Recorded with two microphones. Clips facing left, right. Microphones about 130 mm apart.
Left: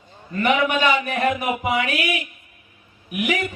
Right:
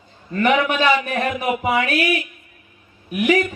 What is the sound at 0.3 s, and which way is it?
A man's voice, 40° right (ahead or behind).